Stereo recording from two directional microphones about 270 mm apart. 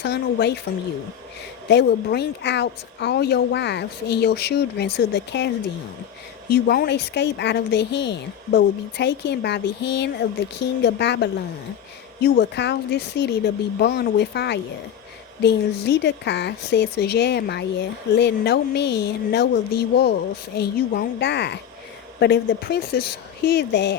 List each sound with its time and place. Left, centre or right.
0.0 s speech: left
1.7 s speech: left
6.5 s speech: left